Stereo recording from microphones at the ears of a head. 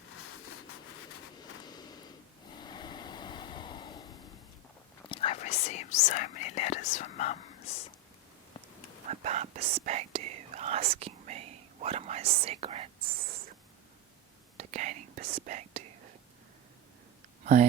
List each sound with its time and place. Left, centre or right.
0.1 s vehicle: left
2.5 s waves: left
5.0 s whispering: left
9.0 s whispering: right
14.6 s whispering: right